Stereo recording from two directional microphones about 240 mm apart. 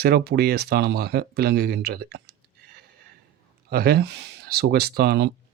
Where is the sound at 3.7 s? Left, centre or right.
Right.